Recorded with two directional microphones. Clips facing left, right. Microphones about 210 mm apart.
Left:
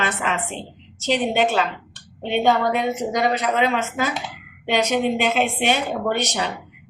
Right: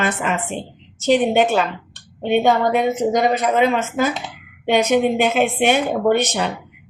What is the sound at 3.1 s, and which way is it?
Speech, 50° right (ahead or behind).